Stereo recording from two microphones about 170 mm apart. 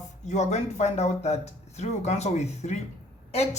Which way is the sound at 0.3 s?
40° left (ahead or behind).